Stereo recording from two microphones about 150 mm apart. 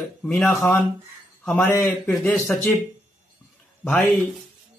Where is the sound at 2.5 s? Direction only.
5° left (ahead or behind).